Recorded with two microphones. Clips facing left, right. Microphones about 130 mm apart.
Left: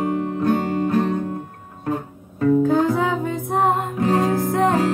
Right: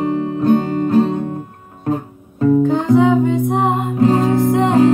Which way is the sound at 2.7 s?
Centre (ahead or behind).